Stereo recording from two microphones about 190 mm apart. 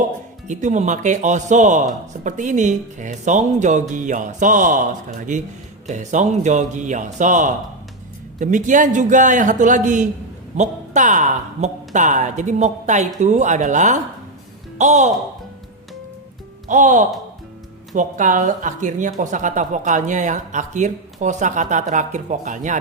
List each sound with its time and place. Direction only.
0.4 s speech: 40° right (ahead or behind)
16.6 s speech: 40° right (ahead or behind)